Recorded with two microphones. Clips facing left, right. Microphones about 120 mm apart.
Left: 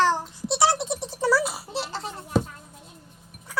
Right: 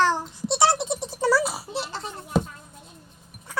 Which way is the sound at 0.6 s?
Centre (ahead or behind).